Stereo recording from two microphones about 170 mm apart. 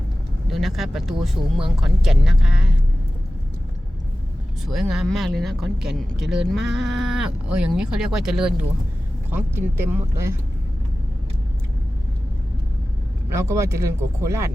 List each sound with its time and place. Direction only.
0.4 s speech: centre (ahead or behind)
4.6 s speech: centre (ahead or behind)
13.3 s speech: 15° right (ahead or behind)